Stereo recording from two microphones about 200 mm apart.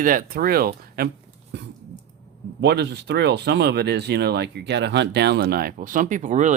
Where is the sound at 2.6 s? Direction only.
55° right (ahead or behind).